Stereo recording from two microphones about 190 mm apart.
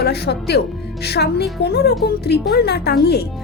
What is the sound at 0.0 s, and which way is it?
Speech, 60° left (ahead or behind).